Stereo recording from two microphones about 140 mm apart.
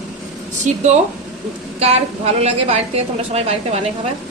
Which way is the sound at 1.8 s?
50° right (ahead or behind).